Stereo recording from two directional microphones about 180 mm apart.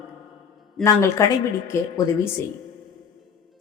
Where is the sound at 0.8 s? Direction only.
15° left (ahead or behind).